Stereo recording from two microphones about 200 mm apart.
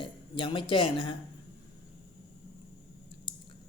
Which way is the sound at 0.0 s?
25° left (ahead or behind).